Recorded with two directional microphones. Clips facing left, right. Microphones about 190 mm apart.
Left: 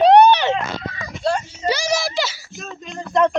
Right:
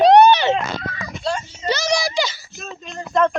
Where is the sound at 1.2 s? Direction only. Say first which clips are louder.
Left 3 dB; 55° left (ahead or behind).